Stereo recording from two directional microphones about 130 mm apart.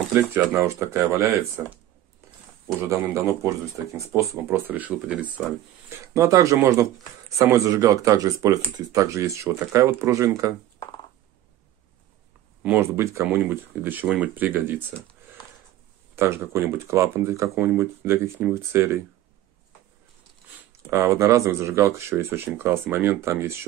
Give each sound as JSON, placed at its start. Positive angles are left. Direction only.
{"t": 0.1, "sound": "speech", "side_deg": -20}
{"t": 2.9, "sound": "speech", "side_deg": -25}
{"t": 6.1, "sound": "speech", "side_deg": -25}
{"t": 12.6, "sound": "speech", "side_deg": -20}
{"t": 16.2, "sound": "speech", "side_deg": -20}
{"t": 20.9, "sound": "speech", "side_deg": -20}